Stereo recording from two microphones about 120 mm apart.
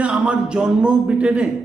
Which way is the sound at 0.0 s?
10° right (ahead or behind).